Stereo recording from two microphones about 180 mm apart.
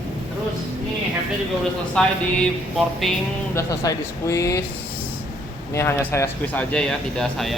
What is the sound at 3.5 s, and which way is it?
Speech, 20° left (ahead or behind).